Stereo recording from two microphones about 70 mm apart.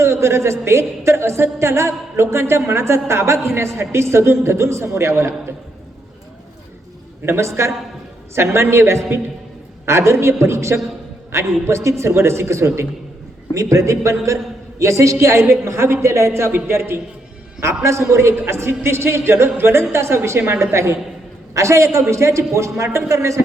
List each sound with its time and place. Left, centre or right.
0.0 s a woman's voice: right
7.3 s a woman's voice: right